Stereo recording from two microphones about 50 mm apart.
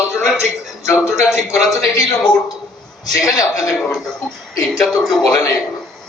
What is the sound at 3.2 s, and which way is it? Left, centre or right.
Speech, left.